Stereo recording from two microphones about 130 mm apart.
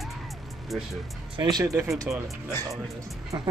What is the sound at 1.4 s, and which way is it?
Speech, 30° right (ahead or behind).